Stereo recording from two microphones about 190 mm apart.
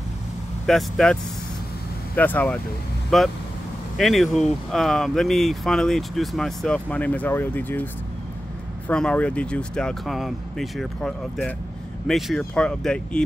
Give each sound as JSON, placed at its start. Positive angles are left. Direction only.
{"t": 0.7, "sound": "speech", "side_deg": 0}
{"t": 2.1, "sound": "speech", "side_deg": 10}